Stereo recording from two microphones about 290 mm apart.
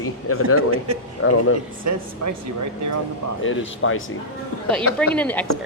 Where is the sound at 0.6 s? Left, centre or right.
Right.